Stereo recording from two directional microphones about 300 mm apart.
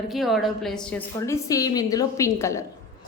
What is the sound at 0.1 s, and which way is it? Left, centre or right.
A woman's voice, centre.